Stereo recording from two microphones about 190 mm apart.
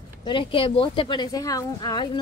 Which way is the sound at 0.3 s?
25° left (ahead or behind).